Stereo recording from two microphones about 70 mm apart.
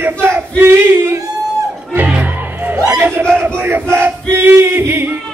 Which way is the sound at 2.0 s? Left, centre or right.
Centre.